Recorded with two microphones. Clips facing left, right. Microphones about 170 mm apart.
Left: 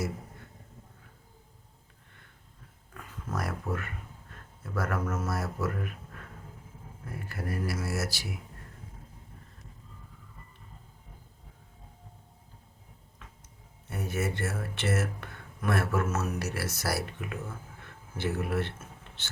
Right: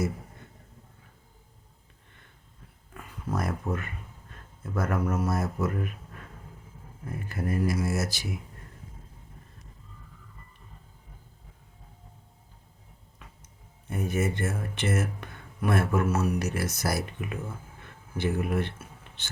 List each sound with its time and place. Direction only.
2.9 s a sound: 20° right (ahead or behind)
4.7 s speech: 20° right (ahead or behind)
7.1 s speech: 20° right (ahead or behind)
13.9 s speech: 15° right (ahead or behind)